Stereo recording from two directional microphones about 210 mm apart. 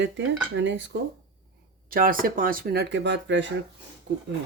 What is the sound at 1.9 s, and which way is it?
Speech, 40° right (ahead or behind).